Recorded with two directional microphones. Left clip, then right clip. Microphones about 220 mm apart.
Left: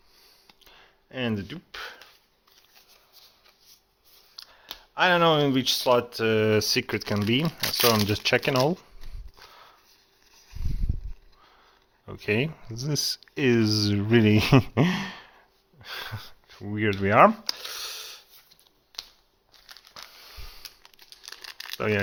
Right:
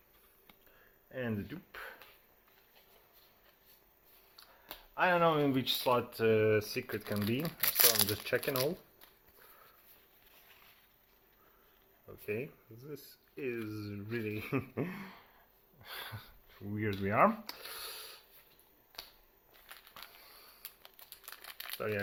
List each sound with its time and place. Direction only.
1.1 s speech: 50° left (ahead or behind)
4.6 s speech: 35° left (ahead or behind)
12.0 s speech: 50° left (ahead or behind)
15.8 s a sound: 30° left (ahead or behind)
19.9 s a sound: 40° left (ahead or behind)
20.8 s crumpling: 10° right (ahead or behind)
21.8 s speech: 50° left (ahead or behind)